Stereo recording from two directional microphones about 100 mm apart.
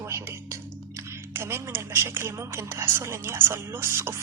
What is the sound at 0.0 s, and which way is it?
Speech, 30° right (ahead or behind).